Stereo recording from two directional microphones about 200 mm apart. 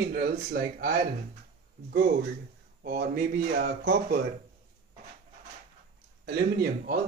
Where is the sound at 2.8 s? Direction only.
50° right (ahead or behind).